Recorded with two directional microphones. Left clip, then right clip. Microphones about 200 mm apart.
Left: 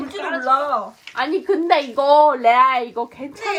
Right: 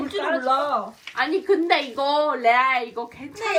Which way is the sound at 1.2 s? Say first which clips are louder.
Left 1 dB; 20° left (ahead or behind).